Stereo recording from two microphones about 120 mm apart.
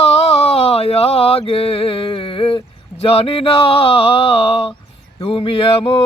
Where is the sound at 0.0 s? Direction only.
60° left (ahead or behind).